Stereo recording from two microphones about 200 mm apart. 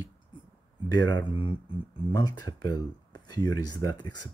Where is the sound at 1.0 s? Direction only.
20° left (ahead or behind).